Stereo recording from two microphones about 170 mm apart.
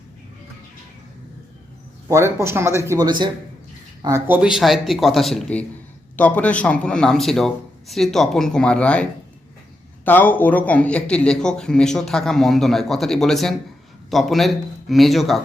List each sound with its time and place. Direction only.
2.0 s speech: 15° right (ahead or behind)
4.4 s speech: 5° right (ahead or behind)